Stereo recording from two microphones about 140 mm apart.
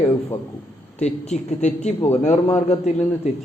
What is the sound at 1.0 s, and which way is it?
Speech, 55° left (ahead or behind).